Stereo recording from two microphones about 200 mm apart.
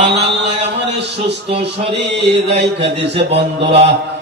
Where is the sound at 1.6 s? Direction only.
60° right (ahead or behind).